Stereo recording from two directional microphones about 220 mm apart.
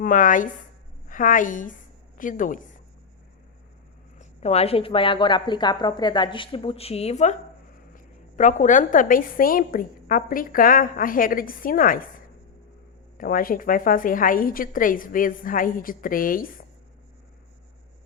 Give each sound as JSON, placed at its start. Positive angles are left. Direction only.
{"t": 0.0, "sound": "a woman's voice", "side_deg": 35}
{"t": 4.2, "sound": "a woman's voice", "side_deg": 30}
{"t": 13.1, "sound": "a woman's voice", "side_deg": 40}